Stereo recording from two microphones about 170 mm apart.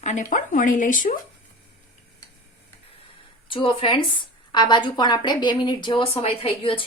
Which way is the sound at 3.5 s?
30° left (ahead or behind).